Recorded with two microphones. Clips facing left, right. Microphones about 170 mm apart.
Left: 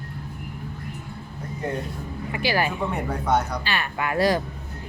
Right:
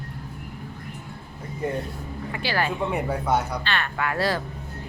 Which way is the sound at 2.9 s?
5° right (ahead or behind).